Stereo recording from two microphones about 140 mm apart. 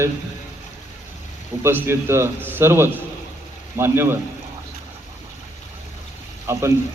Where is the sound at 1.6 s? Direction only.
15° right (ahead or behind).